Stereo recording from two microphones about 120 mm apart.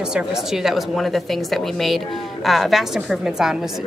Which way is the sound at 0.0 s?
5° right (ahead or behind).